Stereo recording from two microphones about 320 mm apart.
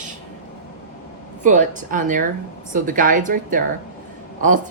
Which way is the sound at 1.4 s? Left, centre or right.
Right.